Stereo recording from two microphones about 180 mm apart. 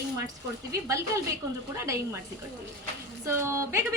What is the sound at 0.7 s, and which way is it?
A woman's voice, 15° right (ahead or behind).